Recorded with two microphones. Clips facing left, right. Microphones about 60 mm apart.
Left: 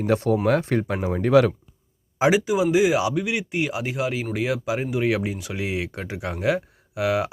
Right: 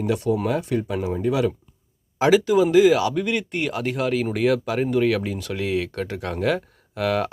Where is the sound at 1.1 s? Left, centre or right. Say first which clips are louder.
Left 6 dB; left.